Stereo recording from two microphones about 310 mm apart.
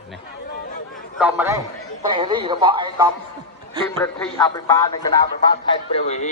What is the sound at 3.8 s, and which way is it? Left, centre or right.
Speech, centre.